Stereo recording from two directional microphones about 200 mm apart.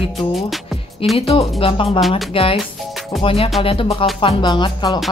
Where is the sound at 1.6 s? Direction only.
25° left (ahead or behind).